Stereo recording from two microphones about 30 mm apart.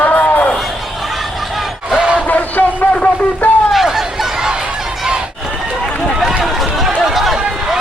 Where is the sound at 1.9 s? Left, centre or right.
Right.